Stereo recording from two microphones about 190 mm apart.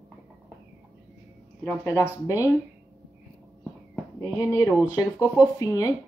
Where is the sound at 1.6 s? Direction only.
10° left (ahead or behind).